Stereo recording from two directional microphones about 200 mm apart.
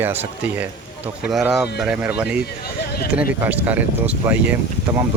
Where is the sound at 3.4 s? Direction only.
10° right (ahead or behind).